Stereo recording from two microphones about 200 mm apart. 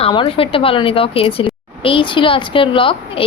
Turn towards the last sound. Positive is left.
turn(degrees=25)  # may be behind; listen again after turning